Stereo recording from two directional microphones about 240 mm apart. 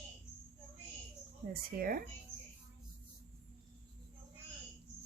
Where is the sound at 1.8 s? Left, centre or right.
Right.